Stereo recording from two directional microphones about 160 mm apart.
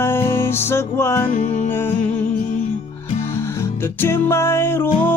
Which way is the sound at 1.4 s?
45° left (ahead or behind).